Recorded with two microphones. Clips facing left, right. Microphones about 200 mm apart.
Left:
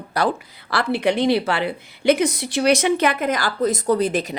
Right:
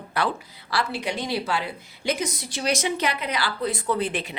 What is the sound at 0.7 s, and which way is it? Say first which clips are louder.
Speech: left 7 dB; 60° left (ahead or behind).